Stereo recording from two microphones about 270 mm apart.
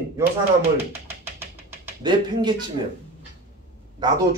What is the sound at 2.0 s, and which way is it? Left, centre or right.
Speech, centre.